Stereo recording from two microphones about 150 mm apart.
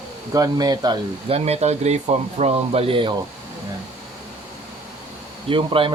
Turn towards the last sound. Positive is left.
turn(degrees=-35)  # may be behind; listen again after turning